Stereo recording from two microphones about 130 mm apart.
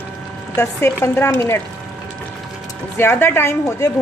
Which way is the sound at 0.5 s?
20° left (ahead or behind).